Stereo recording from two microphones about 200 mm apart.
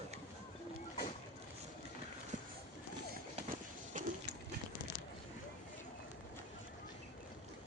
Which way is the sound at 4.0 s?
40° right (ahead or behind).